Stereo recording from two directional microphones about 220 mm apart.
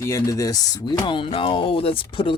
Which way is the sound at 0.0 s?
15° left (ahead or behind).